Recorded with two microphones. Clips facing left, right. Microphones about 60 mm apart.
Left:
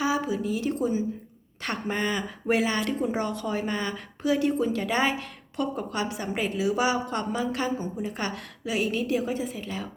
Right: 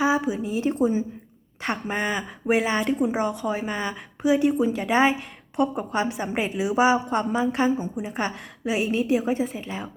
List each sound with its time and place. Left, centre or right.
0.0 s a woman's voice: right